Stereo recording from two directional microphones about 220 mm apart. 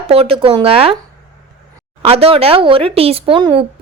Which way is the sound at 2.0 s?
25° right (ahead or behind).